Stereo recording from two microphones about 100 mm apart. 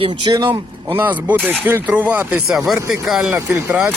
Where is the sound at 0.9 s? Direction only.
20° right (ahead or behind).